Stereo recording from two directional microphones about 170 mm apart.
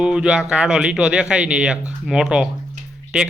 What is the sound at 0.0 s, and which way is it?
Speech, 5° right (ahead or behind).